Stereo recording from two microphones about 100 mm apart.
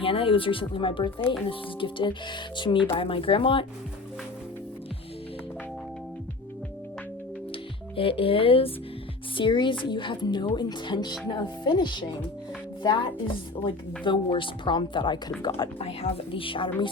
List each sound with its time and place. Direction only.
0.0 s speech: 70° left (ahead or behind); by 2.7 s 50° left (ahead or behind)
2.9 s speech: 65° left (ahead or behind)
7.9 s speech: 65° left (ahead or behind)
9.4 s speech: 55° left (ahead or behind)
12.8 s music: 55° left (ahead or behind)
13.7 s speech: 55° left (ahead or behind)
15.8 s a woman's voice: 75° left (ahead or behind); by 16.9 s 60° left (ahead or behind)